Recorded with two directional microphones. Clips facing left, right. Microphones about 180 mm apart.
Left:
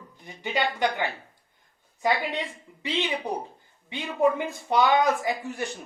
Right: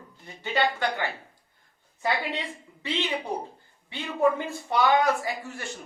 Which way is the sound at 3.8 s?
15° left (ahead or behind).